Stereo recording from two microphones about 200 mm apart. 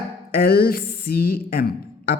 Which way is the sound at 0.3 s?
50° left (ahead or behind).